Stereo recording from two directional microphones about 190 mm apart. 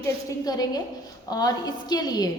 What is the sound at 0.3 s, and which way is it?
A woman's voice, 20° left (ahead or behind).